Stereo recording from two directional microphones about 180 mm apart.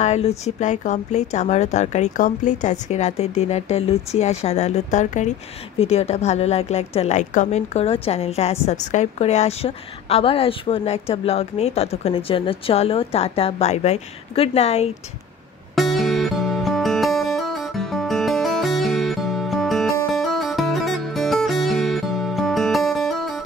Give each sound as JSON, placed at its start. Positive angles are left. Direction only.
{"t": 0.0, "sound": "a woman's voice", "side_deg": 35}
{"t": 15.7, "sound": "music", "side_deg": 0}